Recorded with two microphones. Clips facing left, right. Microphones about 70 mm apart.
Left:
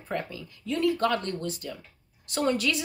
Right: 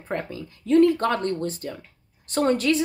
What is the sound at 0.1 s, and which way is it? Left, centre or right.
A woman's voice, right.